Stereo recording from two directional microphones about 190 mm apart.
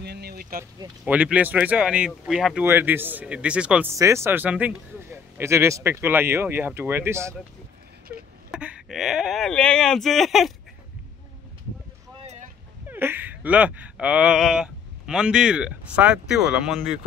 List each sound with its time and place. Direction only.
0.0 s vehicle: 60° right (ahead or behind)
1.0 s speech: 5° right (ahead or behind)
8.5 s speech: 5° right (ahead or behind)
12.8 s speech: 10° right (ahead or behind)